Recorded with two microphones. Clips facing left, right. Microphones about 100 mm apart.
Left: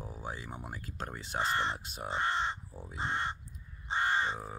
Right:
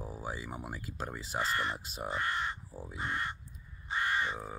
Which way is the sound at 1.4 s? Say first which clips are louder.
Left 2 dB; 30° left (ahead or behind).